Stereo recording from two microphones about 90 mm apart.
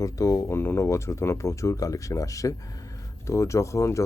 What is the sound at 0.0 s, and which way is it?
Speech, 40° left (ahead or behind).